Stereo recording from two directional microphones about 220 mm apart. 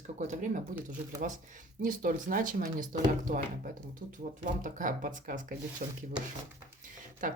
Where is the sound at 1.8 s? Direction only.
40° right (ahead or behind).